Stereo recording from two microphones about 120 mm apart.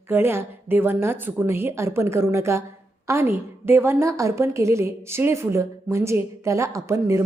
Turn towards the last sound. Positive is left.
turn(degrees=-25)  # may be behind; listen again after turning